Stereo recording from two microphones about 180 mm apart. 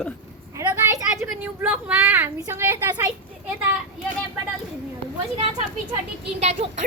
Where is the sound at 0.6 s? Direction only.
15° right (ahead or behind).